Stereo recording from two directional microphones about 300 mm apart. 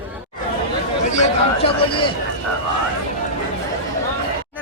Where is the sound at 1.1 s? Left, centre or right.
Left.